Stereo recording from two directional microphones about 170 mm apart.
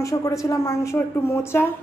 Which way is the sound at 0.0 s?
20° left (ahead or behind).